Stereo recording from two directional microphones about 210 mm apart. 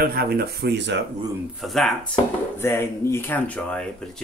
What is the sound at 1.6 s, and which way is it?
Speech, centre (ahead or behind).